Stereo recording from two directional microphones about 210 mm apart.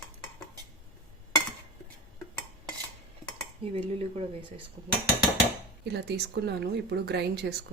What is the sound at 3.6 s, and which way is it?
Speech, 25° right (ahead or behind).